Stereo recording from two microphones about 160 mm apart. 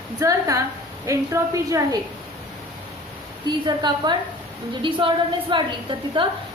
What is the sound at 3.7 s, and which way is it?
A woman's voice, 25° right (ahead or behind).